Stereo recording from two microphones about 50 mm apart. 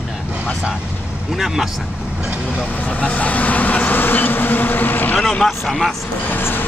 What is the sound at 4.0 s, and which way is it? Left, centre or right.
Speech, left.